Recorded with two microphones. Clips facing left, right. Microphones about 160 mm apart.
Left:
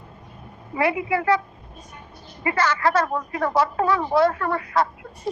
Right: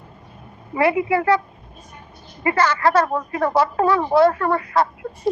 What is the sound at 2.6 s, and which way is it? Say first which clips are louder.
Speech: right 2 dB; 30° right (ahead or behind).